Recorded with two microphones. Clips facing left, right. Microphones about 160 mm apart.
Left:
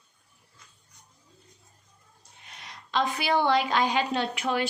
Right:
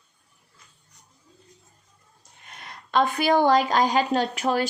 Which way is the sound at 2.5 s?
50° right (ahead or behind).